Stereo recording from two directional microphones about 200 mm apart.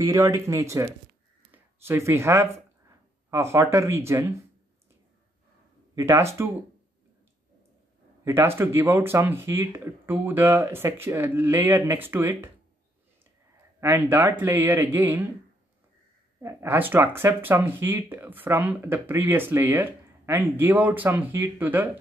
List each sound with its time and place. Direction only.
0.1 s speech: 15° right (ahead or behind)
5.9 s speech: 15° right (ahead or behind)
8.2 s speech: 10° right (ahead or behind)
13.7 s speech: 10° right (ahead or behind)
16.3 s speech: 10° right (ahead or behind)